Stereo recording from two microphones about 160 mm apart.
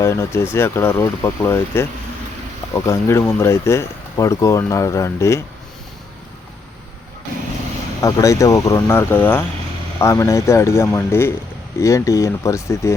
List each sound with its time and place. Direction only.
0.0 s speech: 15° left (ahead or behind)
8.0 s speech: 20° left (ahead or behind)